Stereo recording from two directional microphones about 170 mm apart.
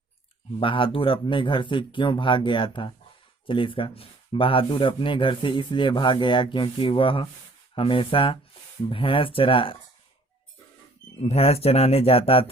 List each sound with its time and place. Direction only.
0.6 s speech: 30° left (ahead or behind)
11.2 s speech: 35° left (ahead or behind)